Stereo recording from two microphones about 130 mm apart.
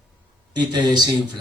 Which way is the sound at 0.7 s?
35° right (ahead or behind).